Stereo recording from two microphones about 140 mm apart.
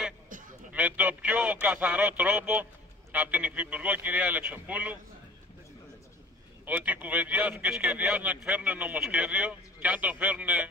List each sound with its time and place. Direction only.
0.3 s a sound: 70° right (ahead or behind)
0.7 s speech: 10° right (ahead or behind)
6.6 s speech: 10° right (ahead or behind)